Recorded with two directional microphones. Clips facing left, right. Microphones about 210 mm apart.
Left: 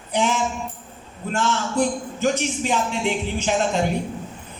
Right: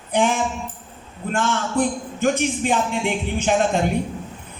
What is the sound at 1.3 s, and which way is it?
A man's voice, 55° right (ahead or behind).